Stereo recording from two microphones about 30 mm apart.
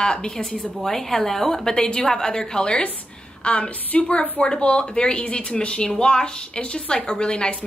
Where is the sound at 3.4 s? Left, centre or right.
Left.